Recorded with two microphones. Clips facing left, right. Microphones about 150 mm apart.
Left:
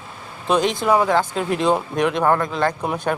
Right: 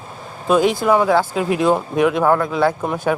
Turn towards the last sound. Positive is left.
turn(degrees=0)  # may be behind; listen again after turning